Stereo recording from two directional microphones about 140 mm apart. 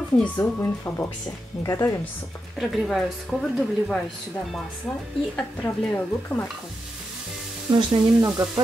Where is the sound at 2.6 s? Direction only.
Centre (ahead or behind).